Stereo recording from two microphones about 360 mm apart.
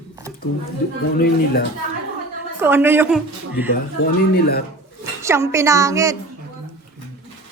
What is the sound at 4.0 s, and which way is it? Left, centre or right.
Speech, left.